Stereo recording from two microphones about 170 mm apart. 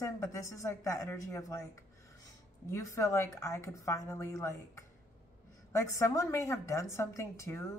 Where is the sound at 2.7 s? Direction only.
20° left (ahead or behind).